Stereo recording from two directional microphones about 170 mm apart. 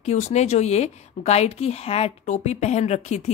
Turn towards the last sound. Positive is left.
turn(degrees=40)  # may be behind; listen again after turning